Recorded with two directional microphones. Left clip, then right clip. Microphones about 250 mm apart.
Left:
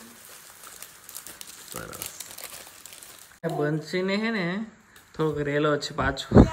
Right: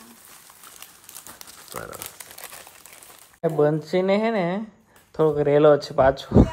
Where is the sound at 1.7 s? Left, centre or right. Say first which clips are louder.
Right 3 dB; centre.